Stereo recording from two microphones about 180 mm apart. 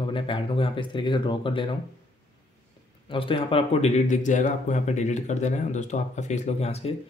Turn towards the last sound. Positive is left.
turn(degrees=35)  # may be behind; listen again after turning